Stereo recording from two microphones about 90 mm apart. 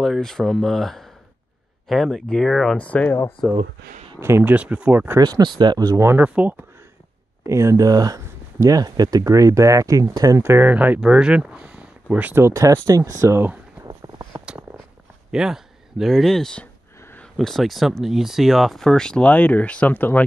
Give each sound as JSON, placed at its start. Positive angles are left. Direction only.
{"t": 0.0, "sound": "speech", "side_deg": 5}
{"t": 2.8, "sound": "speech", "side_deg": 15}
{"t": 4.2, "sound": "speech", "side_deg": -25}
{"t": 5.2, "sound": "speech", "side_deg": -55}
{"t": 5.9, "sound": "speech", "side_deg": -30}
{"t": 6.2, "sound": "speech", "side_deg": -15}
{"t": 7.4, "sound": "speech", "side_deg": -35}
{"t": 10.4, "sound": "speech", "side_deg": -25}
{"t": 10.7, "sound": "speech", "side_deg": -15}
{"t": 13.8, "sound": "a sound", "side_deg": -40}
{"t": 15.3, "sound": "speech", "side_deg": -5}